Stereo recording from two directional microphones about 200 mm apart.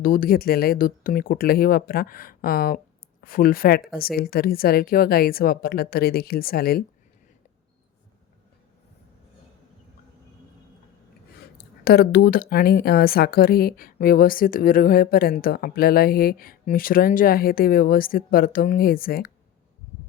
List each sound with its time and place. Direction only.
0.0 s speech: 45° left (ahead or behind)
11.5 s speech: 50° left (ahead or behind)